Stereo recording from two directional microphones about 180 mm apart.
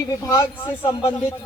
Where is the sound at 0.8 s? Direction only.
15° left (ahead or behind).